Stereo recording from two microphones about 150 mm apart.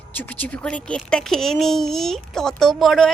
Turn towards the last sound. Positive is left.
turn(degrees=0)  # may be behind; listen again after turning